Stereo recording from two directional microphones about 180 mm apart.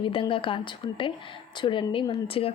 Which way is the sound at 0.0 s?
30° left (ahead or behind).